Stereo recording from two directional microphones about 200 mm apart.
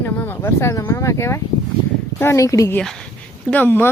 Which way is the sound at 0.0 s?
10° left (ahead or behind).